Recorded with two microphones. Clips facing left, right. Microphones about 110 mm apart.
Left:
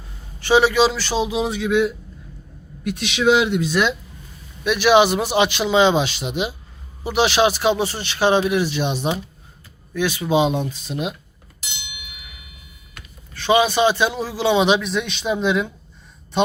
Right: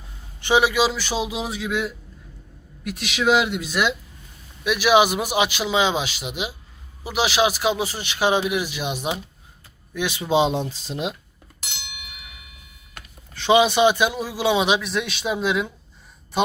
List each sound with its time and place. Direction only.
0.3 s a man's voice: 20° right (ahead or behind)
10.2 s speech: 25° right (ahead or behind)
13.3 s a man's voice: 20° right (ahead or behind); by 15.7 s 5° right (ahead or behind)